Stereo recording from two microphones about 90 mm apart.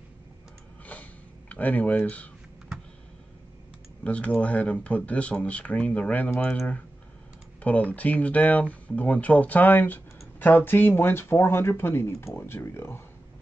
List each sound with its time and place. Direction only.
1.5 s speech: 15° left (ahead or behind)
4.0 s speech: 15° left (ahead or behind)
7.9 s speech: 15° left (ahead or behind)